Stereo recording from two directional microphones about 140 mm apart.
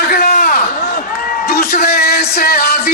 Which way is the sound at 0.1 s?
90° left.